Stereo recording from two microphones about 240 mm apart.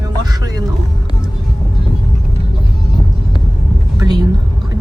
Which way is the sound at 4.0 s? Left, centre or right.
Centre.